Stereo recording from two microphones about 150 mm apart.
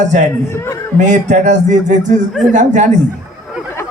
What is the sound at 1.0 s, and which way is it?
Speech, 55° right (ahead or behind).